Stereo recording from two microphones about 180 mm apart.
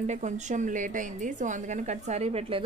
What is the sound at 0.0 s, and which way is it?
A woman's voice, 40° right (ahead or behind).